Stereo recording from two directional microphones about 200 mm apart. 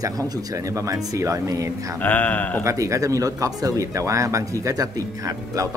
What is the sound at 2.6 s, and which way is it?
Speech, 15° right (ahead or behind).